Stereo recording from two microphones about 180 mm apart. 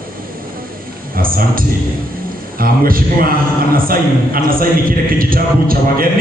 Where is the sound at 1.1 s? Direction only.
55° right (ahead or behind).